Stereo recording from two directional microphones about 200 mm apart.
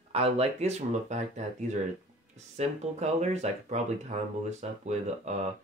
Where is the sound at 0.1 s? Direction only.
30° right (ahead or behind).